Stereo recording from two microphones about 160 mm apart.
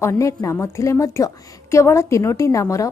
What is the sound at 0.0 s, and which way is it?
A woman's voice, 20° left (ahead or behind).